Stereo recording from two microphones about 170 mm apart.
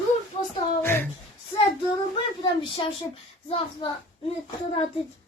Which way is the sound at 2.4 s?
30° left (ahead or behind).